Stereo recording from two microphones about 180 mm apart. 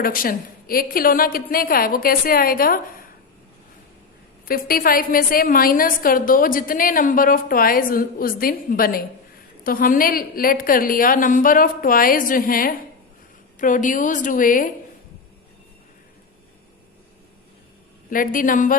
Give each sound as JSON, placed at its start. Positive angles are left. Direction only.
{"t": 0.0, "sound": "a woman's voice", "side_deg": 50}
{"t": 4.4, "sound": "a woman's voice", "side_deg": 55}
{"t": 18.1, "sound": "a woman's voice", "side_deg": 50}